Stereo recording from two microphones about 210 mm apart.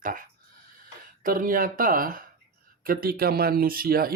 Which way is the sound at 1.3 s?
40° right (ahead or behind).